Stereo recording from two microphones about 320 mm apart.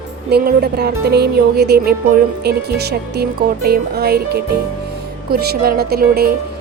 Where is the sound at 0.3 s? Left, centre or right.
Right.